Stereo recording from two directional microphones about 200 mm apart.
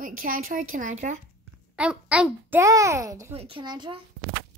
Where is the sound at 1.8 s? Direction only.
5° right (ahead or behind); by 4.0 s 20° right (ahead or behind).